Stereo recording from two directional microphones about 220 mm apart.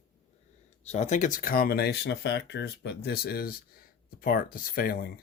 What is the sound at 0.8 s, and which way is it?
Speech, 30° left (ahead or behind).